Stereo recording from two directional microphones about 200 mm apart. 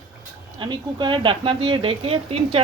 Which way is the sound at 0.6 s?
25° right (ahead or behind).